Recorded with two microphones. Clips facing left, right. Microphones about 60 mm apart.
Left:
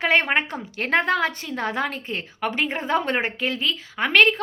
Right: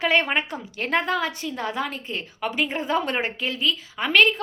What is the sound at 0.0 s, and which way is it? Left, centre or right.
A woman's voice, left.